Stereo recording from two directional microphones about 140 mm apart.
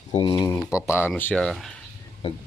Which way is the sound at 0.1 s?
40° left (ahead or behind).